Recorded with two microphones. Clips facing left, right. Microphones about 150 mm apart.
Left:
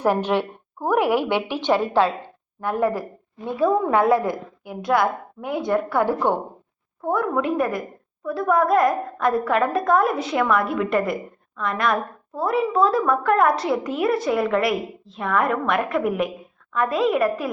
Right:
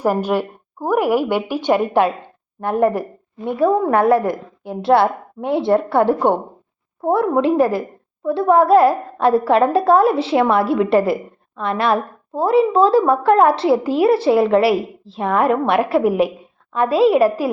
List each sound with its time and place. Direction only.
0.0 s a woman's voice: 10° right (ahead or behind); by 3.5 s 25° right (ahead or behind)
4.0 s a woman's voice: 15° left (ahead or behind)
4.6 s a woman's voice: 30° right (ahead or behind)